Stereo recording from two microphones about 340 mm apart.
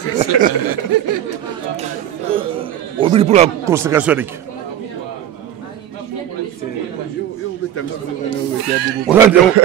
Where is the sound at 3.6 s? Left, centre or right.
Centre.